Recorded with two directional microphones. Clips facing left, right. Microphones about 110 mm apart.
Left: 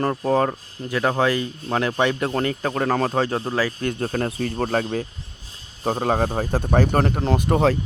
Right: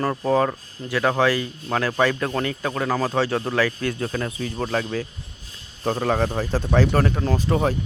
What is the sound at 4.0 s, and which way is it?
Speech, 45° left (ahead or behind).